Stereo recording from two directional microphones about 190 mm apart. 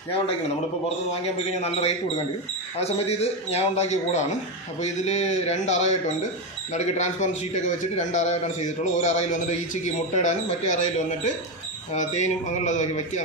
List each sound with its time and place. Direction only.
1.6 s a man's voice: 30° left (ahead or behind)